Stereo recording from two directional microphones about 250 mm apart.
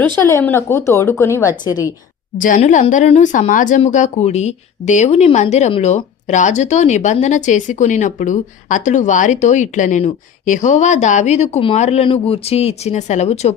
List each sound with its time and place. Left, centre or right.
0.2 s speech: centre
2.4 s speech: left